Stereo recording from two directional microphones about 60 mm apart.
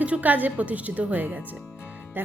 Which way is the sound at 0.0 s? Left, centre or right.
Right.